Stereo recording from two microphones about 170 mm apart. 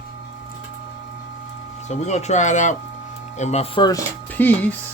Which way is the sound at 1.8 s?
40° left (ahead or behind).